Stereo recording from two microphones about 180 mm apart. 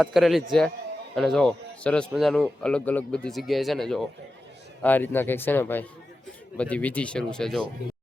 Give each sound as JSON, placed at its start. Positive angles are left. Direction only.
{"t": 0.0, "sound": "a man's voice", "side_deg": 0}